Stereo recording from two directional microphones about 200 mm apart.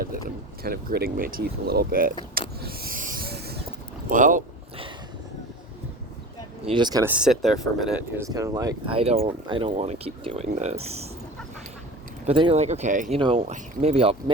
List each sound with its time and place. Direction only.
0.6 s speech: 50° right (ahead or behind)
2.6 s a sound: 50° right (ahead or behind)
4.1 s speech: 40° right (ahead or behind)
6.7 s speech: 20° right (ahead or behind)
7.1 s speech: 5° right (ahead or behind)
8.2 s speech: 15° right (ahead or behind)
8.9 s speech: 30° right (ahead or behind)
12.2 s speech: 30° right (ahead or behind)